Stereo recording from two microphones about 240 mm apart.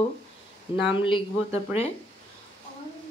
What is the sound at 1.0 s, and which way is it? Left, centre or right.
Speech, left.